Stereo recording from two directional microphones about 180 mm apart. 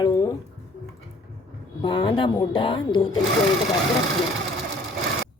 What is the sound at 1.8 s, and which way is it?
A woman's voice, 25° left (ahead or behind).